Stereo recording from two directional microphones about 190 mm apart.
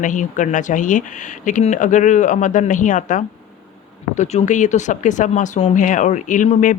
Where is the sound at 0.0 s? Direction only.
40° left (ahead or behind).